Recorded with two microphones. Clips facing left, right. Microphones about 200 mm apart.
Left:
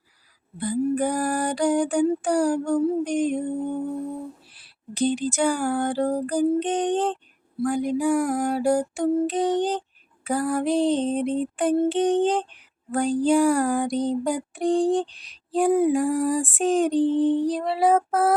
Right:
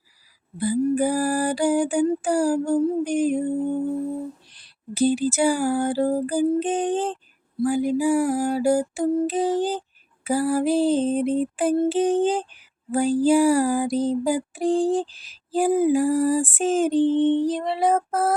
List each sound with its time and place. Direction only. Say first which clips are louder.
0.8 s music: right 2 dB; 5° right (ahead or behind)
2.8 s a sound: right 1 dB; 5° right (ahead or behind)
4.9 s music: right 3 dB; 5° right (ahead or behind)